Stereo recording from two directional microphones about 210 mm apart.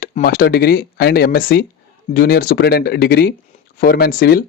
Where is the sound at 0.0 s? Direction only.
40° left (ahead or behind).